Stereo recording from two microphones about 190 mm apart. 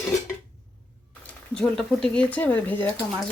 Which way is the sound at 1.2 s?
5° left (ahead or behind).